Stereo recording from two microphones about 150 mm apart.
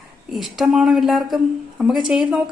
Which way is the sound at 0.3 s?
5° right (ahead or behind).